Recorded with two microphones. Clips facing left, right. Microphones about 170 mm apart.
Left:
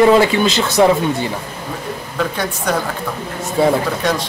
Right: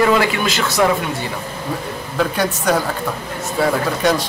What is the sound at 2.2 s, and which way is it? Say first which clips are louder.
Speech: right 2 dB; centre (ahead or behind).